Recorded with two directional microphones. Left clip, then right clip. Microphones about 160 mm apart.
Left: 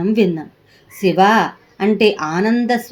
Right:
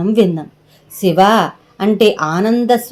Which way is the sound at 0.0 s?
30° right (ahead or behind).